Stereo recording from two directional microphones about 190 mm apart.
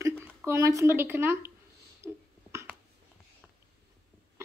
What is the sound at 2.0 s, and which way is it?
Beatboxing, 15° right (ahead or behind).